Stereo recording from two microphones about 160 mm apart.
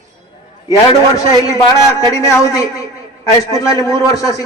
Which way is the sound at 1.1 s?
20° left (ahead or behind).